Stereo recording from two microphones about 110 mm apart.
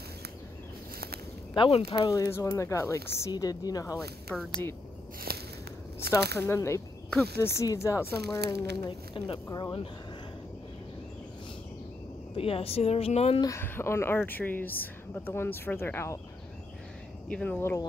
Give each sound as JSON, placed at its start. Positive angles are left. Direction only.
{"t": 1.5, "sound": "speech", "side_deg": 50}
{"t": 2.0, "sound": "a woman's voice", "side_deg": 30}
{"t": 4.3, "sound": "speech", "side_deg": 5}
{"t": 6.1, "sound": "a woman's voice", "side_deg": 25}
{"t": 8.3, "sound": "speech", "side_deg": 45}
{"t": 12.4, "sound": "speech", "side_deg": 60}
{"t": 13.6, "sound": "a woman's voice", "side_deg": 25}
{"t": 17.3, "sound": "speech", "side_deg": 10}
{"t": 17.6, "sound": "a woman's voice", "side_deg": 20}